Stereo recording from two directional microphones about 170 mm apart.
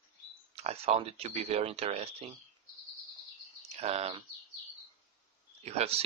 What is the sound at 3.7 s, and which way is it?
Speech, 35° right (ahead or behind).